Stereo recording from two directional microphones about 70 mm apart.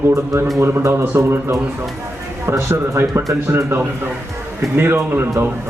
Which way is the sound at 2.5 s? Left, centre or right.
Right.